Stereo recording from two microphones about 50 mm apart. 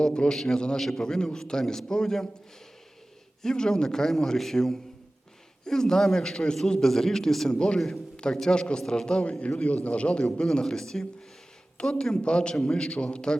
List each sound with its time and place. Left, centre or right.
0.0 s a man's voice: centre
0.8 s a man's voice: centre
1.0 s a man's voice: centre
3.4 s a man's voice: centre
9.5 s a man's voice: left